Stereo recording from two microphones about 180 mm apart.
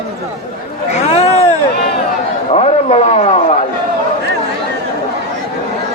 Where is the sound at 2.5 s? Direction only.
35° left (ahead or behind).